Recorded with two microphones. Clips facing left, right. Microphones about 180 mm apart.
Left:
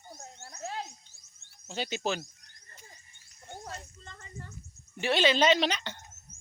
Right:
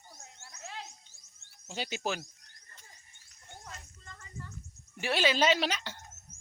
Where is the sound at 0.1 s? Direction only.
45° left (ahead or behind).